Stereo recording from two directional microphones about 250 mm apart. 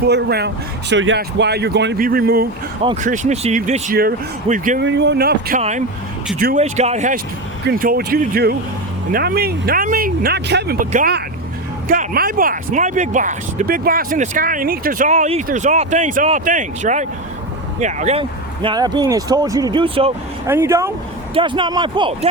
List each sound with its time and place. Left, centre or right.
0.1 s speech: right
4.8 s speech: right
20.5 s speech: centre